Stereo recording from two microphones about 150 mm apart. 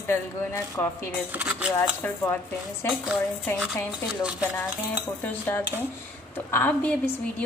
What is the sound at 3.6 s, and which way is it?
Speech, 5° right (ahead or behind).